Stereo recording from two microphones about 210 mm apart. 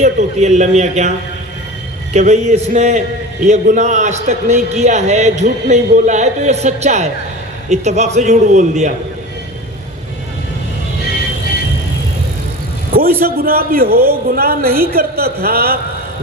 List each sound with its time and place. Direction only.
0.0 s a man's voice: 35° right (ahead or behind)
2.1 s a man's voice: 35° right (ahead or behind)
12.9 s a man's voice: 45° right (ahead or behind)